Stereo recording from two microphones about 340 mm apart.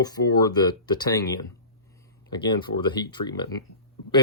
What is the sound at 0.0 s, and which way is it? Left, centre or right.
Speech, centre.